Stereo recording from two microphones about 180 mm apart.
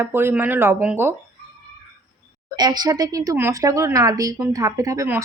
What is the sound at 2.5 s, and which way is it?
Speech, 20° right (ahead or behind).